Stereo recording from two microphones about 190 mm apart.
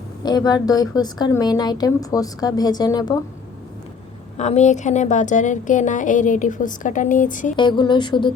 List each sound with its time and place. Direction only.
0.2 s a woman's voice: 20° left (ahead or behind)
4.4 s a woman's voice: 35° left (ahead or behind)
7.5 s a woman's voice: 25° left (ahead or behind)